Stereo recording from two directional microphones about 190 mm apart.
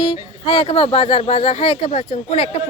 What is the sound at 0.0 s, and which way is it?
Speech, 25° left (ahead or behind).